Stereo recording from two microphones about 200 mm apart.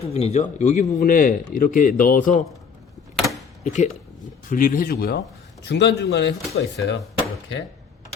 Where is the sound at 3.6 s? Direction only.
40° left (ahead or behind); by 6.7 s 60° left (ahead or behind).